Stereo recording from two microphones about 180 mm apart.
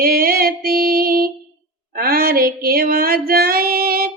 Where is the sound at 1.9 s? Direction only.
55° right (ahead or behind).